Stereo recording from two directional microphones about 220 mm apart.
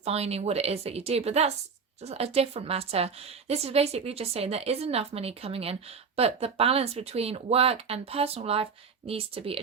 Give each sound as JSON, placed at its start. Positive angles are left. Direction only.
{"t": 0.0, "sound": "a woman's voice", "side_deg": -30}